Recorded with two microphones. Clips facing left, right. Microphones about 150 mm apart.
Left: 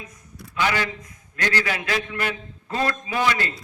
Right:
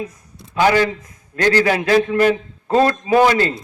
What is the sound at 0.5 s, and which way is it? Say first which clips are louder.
A man's voice: right 9 dB; 35° right (ahead or behind).